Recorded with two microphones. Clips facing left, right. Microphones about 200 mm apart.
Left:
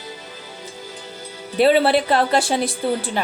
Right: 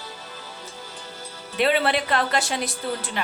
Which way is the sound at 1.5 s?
35° left (ahead or behind).